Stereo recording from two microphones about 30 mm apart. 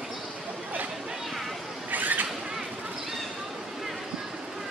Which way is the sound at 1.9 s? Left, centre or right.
Right.